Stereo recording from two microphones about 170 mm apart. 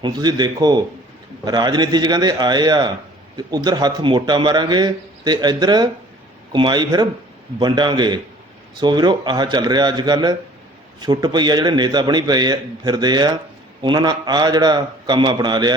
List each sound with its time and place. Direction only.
0.0 s a man's voice: 25° right (ahead or behind)